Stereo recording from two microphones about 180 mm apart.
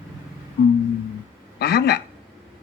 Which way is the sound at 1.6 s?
65° left (ahead or behind).